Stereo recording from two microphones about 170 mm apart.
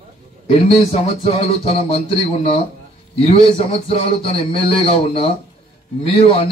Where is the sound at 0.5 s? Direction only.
35° left (ahead or behind).